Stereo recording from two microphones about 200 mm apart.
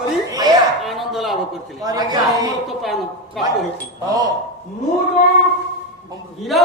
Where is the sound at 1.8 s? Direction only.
20° right (ahead or behind).